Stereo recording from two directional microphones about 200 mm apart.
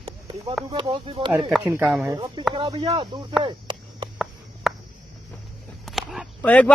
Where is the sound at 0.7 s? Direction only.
25° right (ahead or behind).